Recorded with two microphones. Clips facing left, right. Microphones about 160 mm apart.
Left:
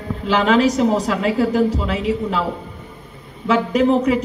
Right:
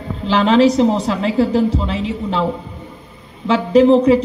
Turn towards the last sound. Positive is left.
turn(degrees=-30)  # may be behind; listen again after turning